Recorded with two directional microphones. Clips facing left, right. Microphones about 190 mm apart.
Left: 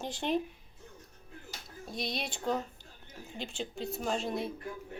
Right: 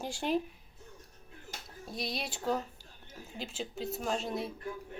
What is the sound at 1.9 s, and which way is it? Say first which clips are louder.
A woman's voice: left 1 dB; centre (ahead or behind).